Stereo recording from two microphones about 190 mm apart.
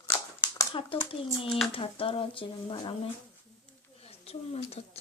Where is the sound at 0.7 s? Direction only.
30° left (ahead or behind).